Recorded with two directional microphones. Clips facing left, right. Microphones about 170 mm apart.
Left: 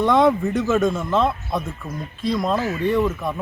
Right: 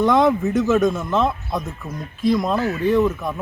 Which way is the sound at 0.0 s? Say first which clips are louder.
Even; centre (ahead or behind).